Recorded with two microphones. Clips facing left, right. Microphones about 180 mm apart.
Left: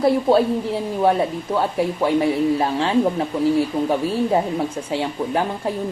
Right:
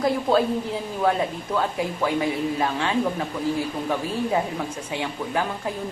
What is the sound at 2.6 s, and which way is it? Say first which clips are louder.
Speech: left 5 dB; 30° left (ahead or behind).